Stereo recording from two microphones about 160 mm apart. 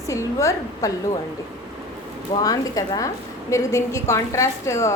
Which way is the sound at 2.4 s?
20° left (ahead or behind).